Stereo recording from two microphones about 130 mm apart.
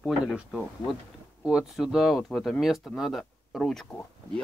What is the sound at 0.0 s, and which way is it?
Speech, centre (ahead or behind).